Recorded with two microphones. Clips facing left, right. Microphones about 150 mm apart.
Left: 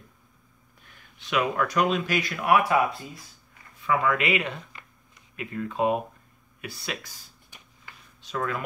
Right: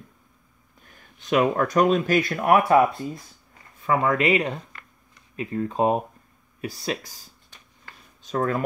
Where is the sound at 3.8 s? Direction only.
40° right (ahead or behind).